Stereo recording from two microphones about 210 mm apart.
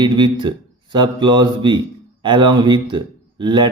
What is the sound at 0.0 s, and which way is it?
Speech, 20° right (ahead or behind).